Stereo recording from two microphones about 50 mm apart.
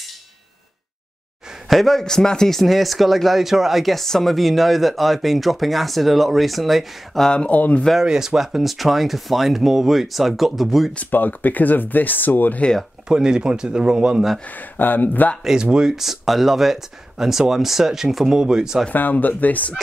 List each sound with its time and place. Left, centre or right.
1.7 s a man's voice: centre
7.2 s speech: left
8.0 s a man's voice: centre
11.1 s speech: left
13.1 s speech: centre
14.4 s speech: left
15.4 s speech: centre
18.9 s speech: left